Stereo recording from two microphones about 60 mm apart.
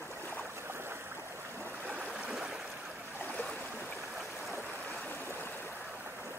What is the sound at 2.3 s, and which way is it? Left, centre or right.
Stream, centre.